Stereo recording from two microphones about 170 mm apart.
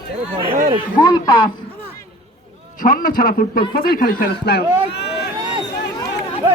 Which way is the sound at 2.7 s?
55° left (ahead or behind).